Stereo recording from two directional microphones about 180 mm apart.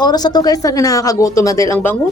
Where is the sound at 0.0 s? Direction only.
25° left (ahead or behind).